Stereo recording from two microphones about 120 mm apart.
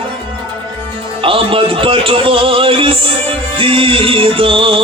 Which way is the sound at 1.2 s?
50° right (ahead or behind).